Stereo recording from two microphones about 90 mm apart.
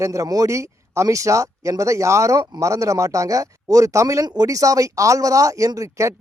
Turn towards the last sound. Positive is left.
turn(degrees=-35)  # may be behind; listen again after turning